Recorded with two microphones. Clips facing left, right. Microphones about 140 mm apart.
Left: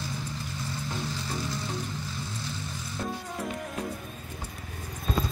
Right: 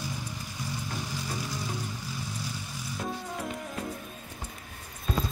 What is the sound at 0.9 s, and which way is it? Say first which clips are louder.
Music: left 2 dB; 10° right (ahead or behind).